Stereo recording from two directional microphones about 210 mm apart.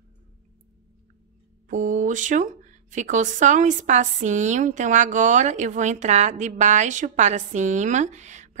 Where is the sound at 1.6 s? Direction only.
35° right (ahead or behind).